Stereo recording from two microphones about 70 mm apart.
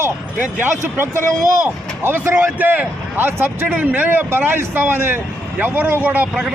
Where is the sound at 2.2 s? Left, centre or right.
Right.